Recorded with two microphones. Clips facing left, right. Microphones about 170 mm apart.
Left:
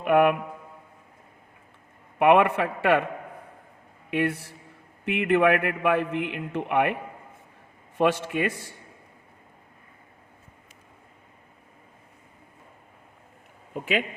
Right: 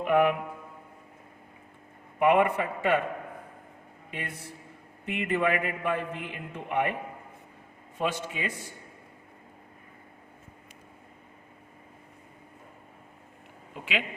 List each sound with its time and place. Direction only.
0.0 s a sound: 60° left (ahead or behind)
2.1 s a man's voice: 75° left (ahead or behind)
4.1 s a man's voice: 75° left (ahead or behind)
7.9 s a man's voice: 65° left (ahead or behind)
13.7 s a man's voice: 45° left (ahead or behind)